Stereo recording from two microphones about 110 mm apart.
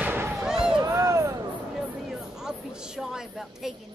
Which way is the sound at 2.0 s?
5° right (ahead or behind).